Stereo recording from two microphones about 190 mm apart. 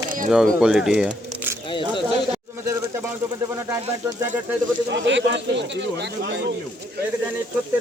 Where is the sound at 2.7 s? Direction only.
15° right (ahead or behind).